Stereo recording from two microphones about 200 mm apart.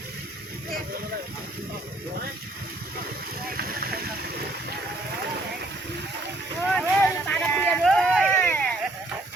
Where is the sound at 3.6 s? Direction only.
50° right (ahead or behind).